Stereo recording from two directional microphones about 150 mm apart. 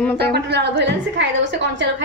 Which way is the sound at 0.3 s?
90° right.